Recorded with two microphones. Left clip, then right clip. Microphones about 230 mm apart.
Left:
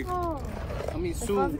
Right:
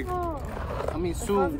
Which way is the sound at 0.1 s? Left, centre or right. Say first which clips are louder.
Left 1 dB; centre.